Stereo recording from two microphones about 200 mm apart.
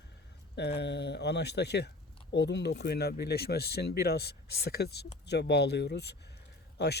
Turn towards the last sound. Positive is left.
turn(degrees=55)  # may be behind; listen again after turning